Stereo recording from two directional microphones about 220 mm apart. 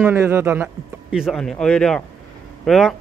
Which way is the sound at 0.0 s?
10° right (ahead or behind).